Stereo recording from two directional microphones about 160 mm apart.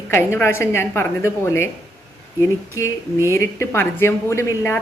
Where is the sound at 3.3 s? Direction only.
15° left (ahead or behind).